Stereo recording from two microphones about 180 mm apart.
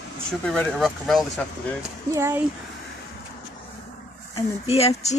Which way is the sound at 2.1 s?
15° right (ahead or behind).